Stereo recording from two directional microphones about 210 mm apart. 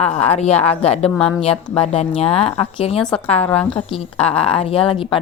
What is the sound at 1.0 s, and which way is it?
Speech, 5° left (ahead or behind).